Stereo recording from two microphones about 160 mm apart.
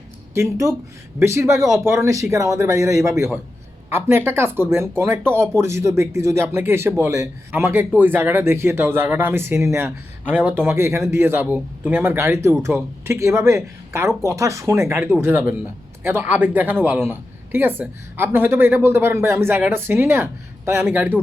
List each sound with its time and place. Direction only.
0.3 s speech: 20° right (ahead or behind)